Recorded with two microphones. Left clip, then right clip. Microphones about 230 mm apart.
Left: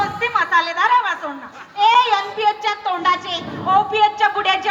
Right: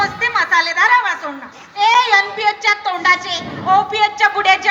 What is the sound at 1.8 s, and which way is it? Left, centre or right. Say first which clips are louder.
A woman's voice: right 2 dB; right.